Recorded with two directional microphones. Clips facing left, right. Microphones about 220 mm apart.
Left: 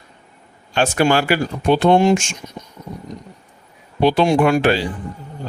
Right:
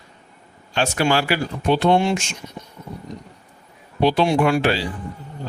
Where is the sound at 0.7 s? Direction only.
50° left (ahead or behind).